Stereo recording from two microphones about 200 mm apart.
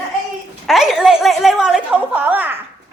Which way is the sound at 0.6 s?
Centre (ahead or behind).